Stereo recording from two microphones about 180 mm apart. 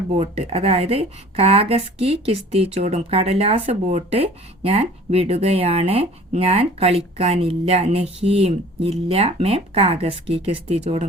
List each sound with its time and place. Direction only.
0.1 s a woman's voice: 35° right (ahead or behind)